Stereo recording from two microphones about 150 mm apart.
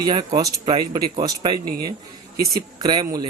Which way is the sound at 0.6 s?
35° right (ahead or behind).